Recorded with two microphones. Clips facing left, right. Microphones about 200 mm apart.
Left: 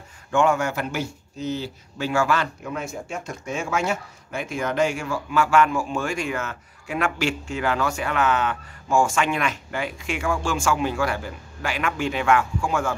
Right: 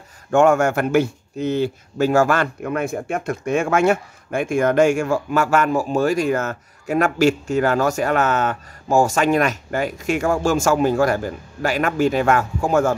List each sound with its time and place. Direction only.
0.3 s speech: 45° right (ahead or behind)